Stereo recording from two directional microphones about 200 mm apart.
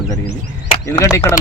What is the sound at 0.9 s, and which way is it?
Speech, 15° left (ahead or behind).